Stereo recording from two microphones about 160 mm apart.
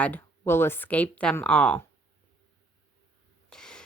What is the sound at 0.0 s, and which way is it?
Speech, 15° left (ahead or behind).